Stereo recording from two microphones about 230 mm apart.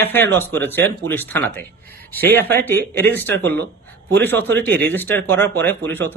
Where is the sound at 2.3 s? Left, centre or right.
Right.